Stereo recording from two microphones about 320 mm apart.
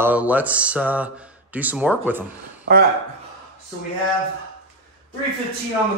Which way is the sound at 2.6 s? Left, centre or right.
Right.